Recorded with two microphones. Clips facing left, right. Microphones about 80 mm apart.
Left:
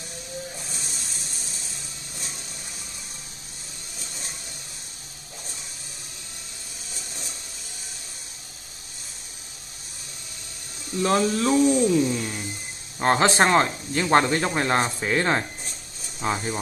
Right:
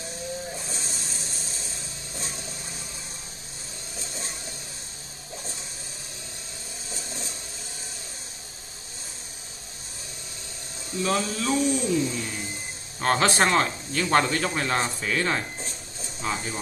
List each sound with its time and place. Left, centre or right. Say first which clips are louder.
0.7 s vehicle: right 2 dB; right
4.0 s a sound: right 3 dB; right
6.9 s printer: right 3 dB; right
11.0 s a man's voice: left 5 dB; left